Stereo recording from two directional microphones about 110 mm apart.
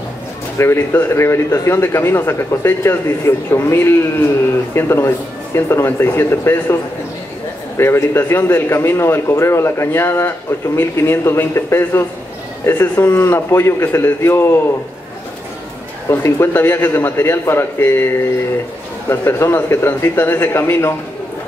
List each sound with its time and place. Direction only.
0.6 s a man's voice: 20° left (ahead or behind)
16.1 s a man's voice: 20° left (ahead or behind)